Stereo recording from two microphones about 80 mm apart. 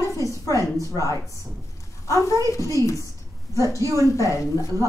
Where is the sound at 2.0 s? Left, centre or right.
Left.